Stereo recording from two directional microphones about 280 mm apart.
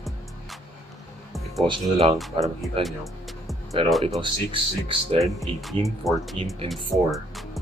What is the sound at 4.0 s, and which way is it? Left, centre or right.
Speech, centre.